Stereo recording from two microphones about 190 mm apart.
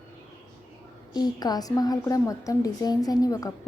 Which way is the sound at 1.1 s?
20° left (ahead or behind).